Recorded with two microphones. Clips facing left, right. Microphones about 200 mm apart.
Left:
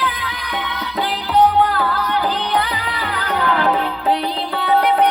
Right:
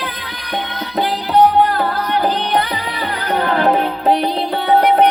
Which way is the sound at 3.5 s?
20° right (ahead or behind).